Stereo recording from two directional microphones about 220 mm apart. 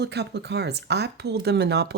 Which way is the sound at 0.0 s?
50° right (ahead or behind).